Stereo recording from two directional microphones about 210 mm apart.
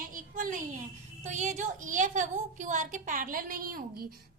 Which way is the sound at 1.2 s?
35° right (ahead or behind).